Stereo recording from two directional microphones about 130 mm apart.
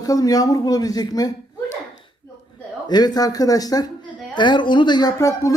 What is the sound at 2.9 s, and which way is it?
Speech, 30° left (ahead or behind).